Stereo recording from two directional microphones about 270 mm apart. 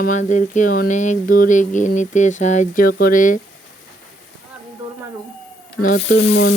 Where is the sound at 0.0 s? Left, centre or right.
Left.